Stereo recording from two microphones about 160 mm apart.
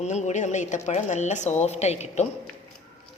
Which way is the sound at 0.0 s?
45° left (ahead or behind).